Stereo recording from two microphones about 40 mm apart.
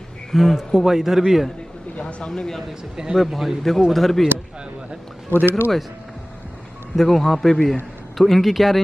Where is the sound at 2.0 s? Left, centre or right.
Left.